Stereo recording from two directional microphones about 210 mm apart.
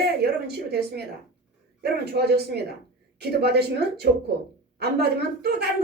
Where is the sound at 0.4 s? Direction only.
50° right (ahead or behind).